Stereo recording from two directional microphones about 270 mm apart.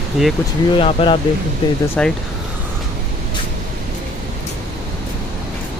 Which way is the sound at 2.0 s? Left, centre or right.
Centre.